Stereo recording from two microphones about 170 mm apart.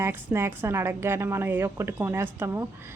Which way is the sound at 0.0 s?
15° right (ahead or behind).